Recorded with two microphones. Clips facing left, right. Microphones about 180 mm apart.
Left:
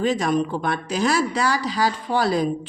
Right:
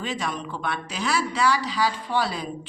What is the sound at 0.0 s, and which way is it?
A woman's voice, 45° left (ahead or behind).